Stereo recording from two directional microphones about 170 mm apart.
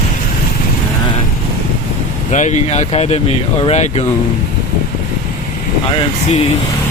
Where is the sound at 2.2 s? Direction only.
45° left (ahead or behind).